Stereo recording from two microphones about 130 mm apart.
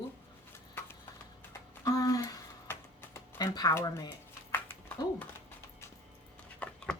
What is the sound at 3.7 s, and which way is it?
Speech, 20° left (ahead or behind).